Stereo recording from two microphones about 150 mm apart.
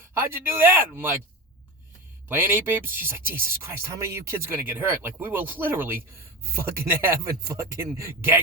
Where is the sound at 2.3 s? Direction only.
15° right (ahead or behind).